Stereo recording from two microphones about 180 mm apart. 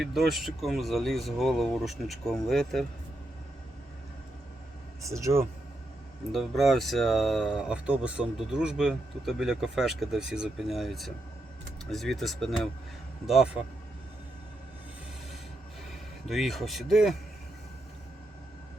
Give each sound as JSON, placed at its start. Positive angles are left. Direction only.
{"t": 0.0, "sound": "speech", "side_deg": 0}
{"t": 5.0, "sound": "speech", "side_deg": -15}
{"t": 6.3, "sound": "speech", "side_deg": 0}
{"t": 16.3, "sound": "speech", "side_deg": 0}